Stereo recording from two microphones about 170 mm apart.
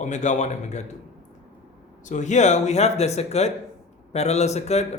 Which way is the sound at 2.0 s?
45° left (ahead or behind).